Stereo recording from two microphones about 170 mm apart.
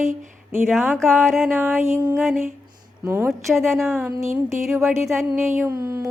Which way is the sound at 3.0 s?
15° right (ahead or behind).